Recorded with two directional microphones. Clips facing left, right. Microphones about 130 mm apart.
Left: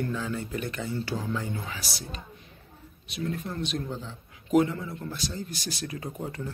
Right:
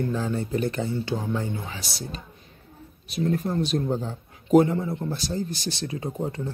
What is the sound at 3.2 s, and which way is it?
Speech, 35° right (ahead or behind).